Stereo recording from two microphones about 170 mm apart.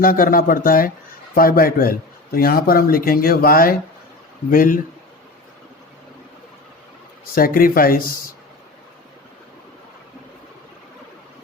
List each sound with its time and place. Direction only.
0.0 s speech: 55° left (ahead or behind)
7.3 s speech: 55° left (ahead or behind)